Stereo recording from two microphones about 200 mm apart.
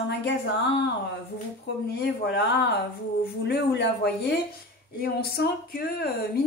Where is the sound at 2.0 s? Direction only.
55° left (ahead or behind).